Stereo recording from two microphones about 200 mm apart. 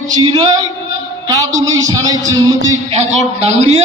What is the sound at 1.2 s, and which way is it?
Speech, 15° right (ahead or behind).